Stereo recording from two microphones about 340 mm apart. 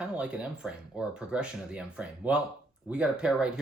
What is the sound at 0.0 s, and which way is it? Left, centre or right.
Speech, centre.